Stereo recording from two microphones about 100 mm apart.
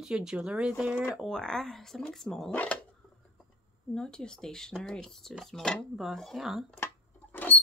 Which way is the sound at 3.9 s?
5° left (ahead or behind).